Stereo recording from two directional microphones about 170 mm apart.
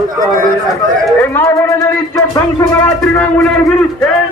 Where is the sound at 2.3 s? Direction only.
20° left (ahead or behind).